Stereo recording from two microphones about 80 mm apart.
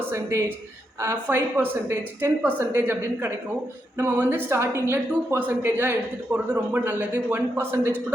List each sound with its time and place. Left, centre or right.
0.1 s a woman's voice: right